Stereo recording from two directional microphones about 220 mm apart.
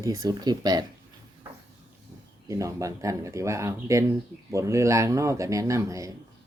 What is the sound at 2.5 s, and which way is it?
Speech, 15° right (ahead or behind).